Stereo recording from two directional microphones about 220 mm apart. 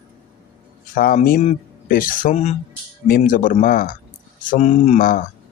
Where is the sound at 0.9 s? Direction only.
40° left (ahead or behind).